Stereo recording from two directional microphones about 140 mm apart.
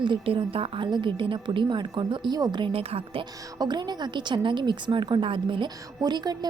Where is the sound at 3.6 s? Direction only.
30° right (ahead or behind).